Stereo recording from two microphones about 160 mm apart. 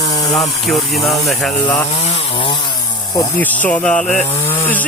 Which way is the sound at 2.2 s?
30° left (ahead or behind).